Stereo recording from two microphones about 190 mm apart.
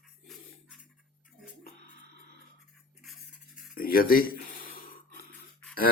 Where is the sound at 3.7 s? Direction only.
50° left (ahead or behind).